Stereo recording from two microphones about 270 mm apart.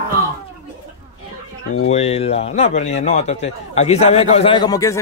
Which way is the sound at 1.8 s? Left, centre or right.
Left.